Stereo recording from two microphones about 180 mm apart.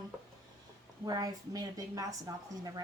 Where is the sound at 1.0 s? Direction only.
20° right (ahead or behind).